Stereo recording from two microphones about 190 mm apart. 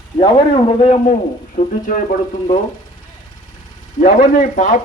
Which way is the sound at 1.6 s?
45° left (ahead or behind).